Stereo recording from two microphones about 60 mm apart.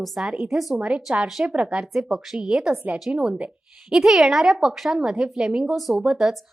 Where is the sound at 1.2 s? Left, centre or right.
Centre.